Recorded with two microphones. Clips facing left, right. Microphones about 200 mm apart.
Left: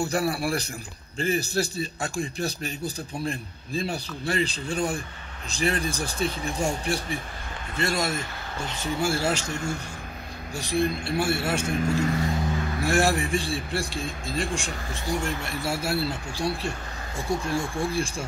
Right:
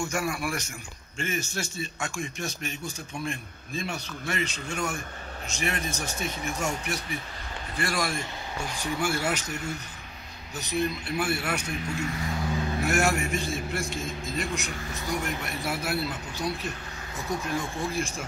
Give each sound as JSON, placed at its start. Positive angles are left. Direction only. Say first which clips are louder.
{"t": 0.0, "sound": "a man's voice", "louder": "left 4 dB", "side_deg": 35}
{"t": 10.5, "sound": "speech", "louder": "left 3 dB", "side_deg": 30}
{"t": 11.6, "sound": "a man's voice", "louder": "left 7 dB", "side_deg": 45}